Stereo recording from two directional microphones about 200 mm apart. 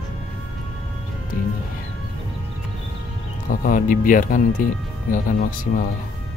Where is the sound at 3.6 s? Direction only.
45° left (ahead or behind).